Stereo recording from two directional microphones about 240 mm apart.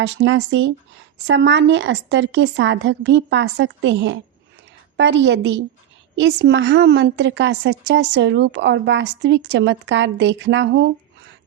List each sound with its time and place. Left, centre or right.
0.0 s a woman's voice: right